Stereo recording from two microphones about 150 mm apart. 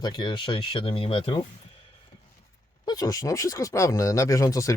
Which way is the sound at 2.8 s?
25° left (ahead or behind).